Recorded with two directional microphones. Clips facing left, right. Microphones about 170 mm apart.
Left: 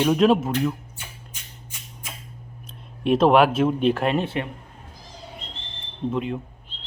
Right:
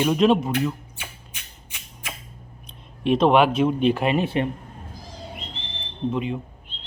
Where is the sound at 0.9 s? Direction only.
70° right (ahead or behind).